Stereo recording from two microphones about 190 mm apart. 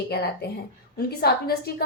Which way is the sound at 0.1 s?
55° left (ahead or behind).